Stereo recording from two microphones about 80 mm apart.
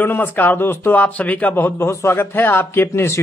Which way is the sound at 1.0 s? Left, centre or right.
Centre.